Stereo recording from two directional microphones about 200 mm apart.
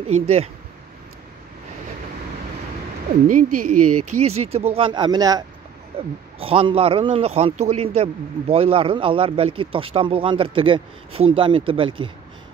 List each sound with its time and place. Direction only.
0.1 s speech: 30° right (ahead or behind)
3.3 s a man's voice: 40° right (ahead or behind); by 5.4 s 20° right (ahead or behind)
6.4 s a man's voice: 30° right (ahead or behind)